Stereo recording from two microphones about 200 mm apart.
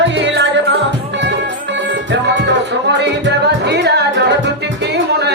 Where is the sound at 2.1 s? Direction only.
60° right (ahead or behind).